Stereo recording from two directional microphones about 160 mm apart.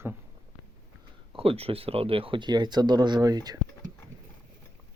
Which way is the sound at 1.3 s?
35° right (ahead or behind).